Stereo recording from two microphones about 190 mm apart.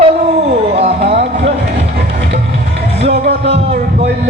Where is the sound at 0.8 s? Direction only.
35° right (ahead or behind).